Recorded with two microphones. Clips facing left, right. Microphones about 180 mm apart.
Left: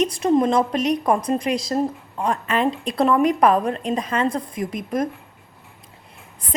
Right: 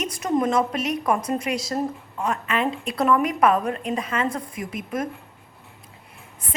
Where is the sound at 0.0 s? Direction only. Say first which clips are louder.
Left 5 dB; 30° left (ahead or behind).